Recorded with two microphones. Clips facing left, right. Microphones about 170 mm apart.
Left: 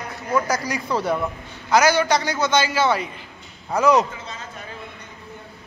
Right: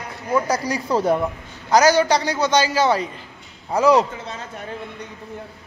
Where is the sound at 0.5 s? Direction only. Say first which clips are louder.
Right 2 dB; 30° right (ahead or behind).